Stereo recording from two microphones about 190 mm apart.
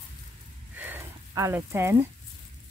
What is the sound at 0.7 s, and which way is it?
Speech, 10° right (ahead or behind).